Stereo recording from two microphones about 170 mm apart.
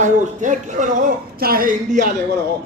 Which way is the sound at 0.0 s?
45° right (ahead or behind).